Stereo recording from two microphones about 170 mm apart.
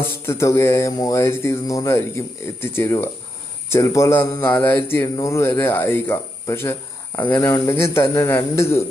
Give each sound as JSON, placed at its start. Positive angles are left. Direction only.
{"t": 0.3, "sound": "speech", "side_deg": 15}